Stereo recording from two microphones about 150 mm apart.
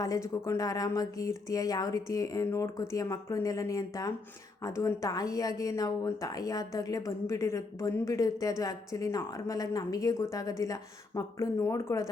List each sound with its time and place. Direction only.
0.0 s a woman's voice: 20° left (ahead or behind)